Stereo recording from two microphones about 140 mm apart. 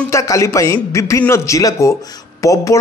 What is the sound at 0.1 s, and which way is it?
A man's voice, 20° left (ahead or behind).